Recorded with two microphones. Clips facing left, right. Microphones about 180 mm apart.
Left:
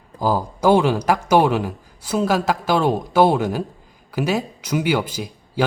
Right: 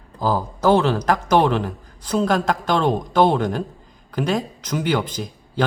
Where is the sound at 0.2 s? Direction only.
10° left (ahead or behind).